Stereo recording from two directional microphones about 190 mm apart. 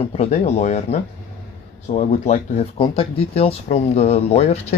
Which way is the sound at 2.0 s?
40° left (ahead or behind).